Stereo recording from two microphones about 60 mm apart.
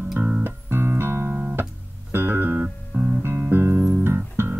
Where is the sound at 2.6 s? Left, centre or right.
Right.